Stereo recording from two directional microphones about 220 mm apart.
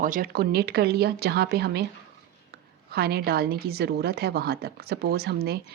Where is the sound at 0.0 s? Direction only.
40° right (ahead or behind).